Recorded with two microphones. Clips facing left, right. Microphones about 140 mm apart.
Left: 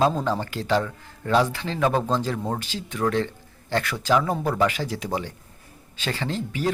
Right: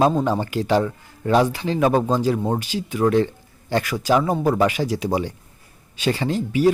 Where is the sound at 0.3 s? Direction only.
15° right (ahead or behind).